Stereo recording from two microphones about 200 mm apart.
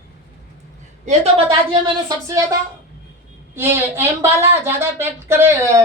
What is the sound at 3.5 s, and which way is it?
Speech, 10° right (ahead or behind).